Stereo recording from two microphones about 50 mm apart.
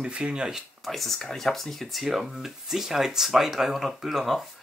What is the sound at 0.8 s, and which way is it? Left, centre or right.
Speech, centre.